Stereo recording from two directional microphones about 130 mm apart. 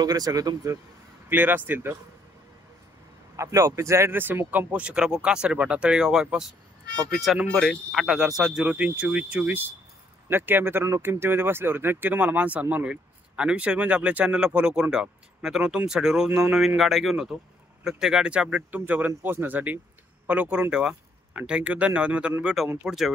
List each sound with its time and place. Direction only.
0.0 s speech: 30° right (ahead or behind)
1.3 s speech: 15° right (ahead or behind)
3.3 s speech: 20° right (ahead or behind); by 23.1 s centre (ahead or behind)